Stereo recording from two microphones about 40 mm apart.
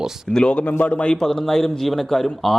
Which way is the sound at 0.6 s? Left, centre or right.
Left.